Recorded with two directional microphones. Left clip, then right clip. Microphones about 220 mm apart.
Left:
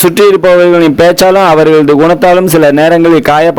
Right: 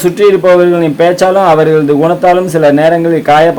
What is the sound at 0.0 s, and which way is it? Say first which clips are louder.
A man's voice: left 2 dB; 40° left (ahead or behind).